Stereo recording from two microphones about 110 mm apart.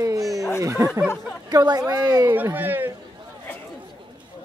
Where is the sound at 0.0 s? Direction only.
30° right (ahead or behind).